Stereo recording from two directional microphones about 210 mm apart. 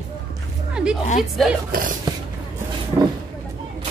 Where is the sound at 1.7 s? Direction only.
40° right (ahead or behind).